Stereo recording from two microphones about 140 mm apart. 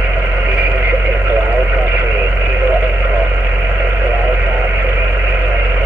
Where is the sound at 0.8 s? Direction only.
15° right (ahead or behind).